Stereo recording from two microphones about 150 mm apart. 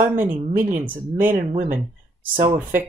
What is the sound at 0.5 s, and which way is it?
Speech, 60° right (ahead or behind).